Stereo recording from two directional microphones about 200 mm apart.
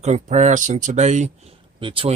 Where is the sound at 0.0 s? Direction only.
35° right (ahead or behind).